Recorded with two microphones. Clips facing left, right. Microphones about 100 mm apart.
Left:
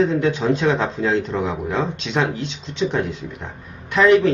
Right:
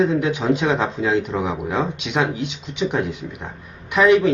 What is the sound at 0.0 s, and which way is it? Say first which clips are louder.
A man's voice: left 1 dB; 10° right (ahead or behind).